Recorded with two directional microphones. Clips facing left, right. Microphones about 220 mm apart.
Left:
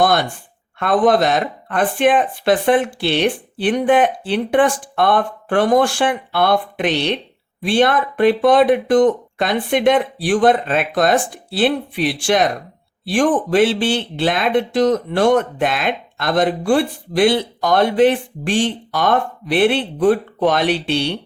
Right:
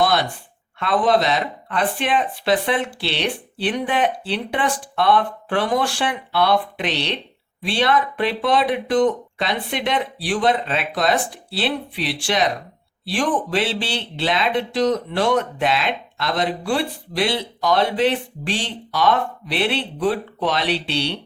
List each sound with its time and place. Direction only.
0.0 s speech: 50° left (ahead or behind)